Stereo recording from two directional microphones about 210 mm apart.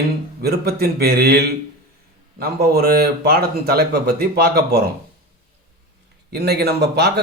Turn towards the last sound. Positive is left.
turn(degrees=-50)  # may be behind; listen again after turning